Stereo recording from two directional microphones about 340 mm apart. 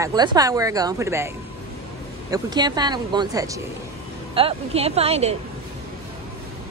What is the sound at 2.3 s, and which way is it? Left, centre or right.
Speech, centre.